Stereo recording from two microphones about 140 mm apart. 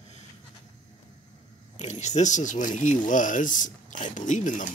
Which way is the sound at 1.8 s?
55° left (ahead or behind).